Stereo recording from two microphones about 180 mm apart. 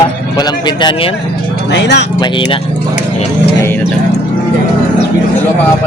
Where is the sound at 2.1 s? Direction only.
25° left (ahead or behind).